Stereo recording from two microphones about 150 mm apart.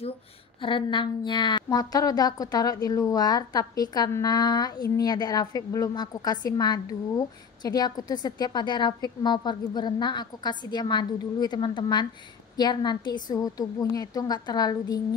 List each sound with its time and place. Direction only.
0.6 s a woman's voice: 35° left (ahead or behind)